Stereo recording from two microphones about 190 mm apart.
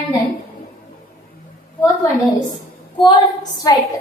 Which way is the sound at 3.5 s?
20° left (ahead or behind).